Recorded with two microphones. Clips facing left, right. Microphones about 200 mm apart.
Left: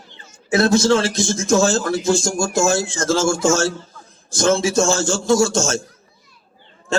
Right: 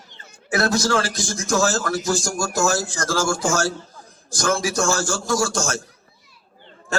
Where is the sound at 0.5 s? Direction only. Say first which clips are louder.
Left 5 dB; 25° left (ahead or behind).